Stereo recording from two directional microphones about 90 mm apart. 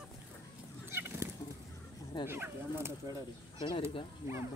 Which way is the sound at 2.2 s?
25° right (ahead or behind).